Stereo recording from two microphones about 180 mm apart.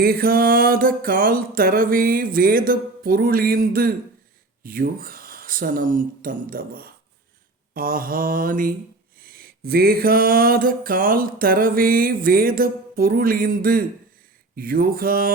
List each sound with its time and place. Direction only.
0.0 s mantra: 60° right (ahead or behind)
4.6 s a sound: 55° right (ahead or behind)
14.5 s mantra: 55° right (ahead or behind)